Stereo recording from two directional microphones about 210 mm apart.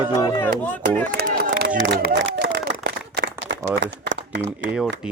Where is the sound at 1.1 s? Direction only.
45° right (ahead or behind).